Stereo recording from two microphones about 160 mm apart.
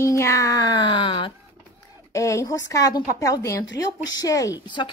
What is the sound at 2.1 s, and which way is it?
Speech, 20° left (ahead or behind).